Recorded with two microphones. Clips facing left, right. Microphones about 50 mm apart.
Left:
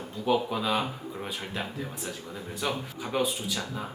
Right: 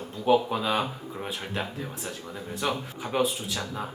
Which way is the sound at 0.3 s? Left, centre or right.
Right.